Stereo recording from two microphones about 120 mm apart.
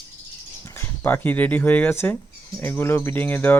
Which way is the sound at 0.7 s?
20° left (ahead or behind).